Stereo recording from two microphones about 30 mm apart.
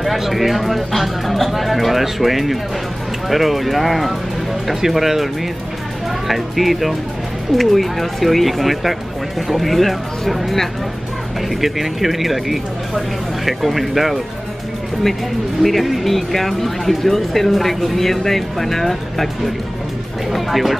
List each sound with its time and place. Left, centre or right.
0.3 s speech: centre
11.6 s speech: centre
15.6 s speech: centre
20.2 s music: centre